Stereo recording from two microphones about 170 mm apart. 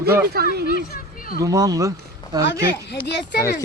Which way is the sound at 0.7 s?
60° left (ahead or behind).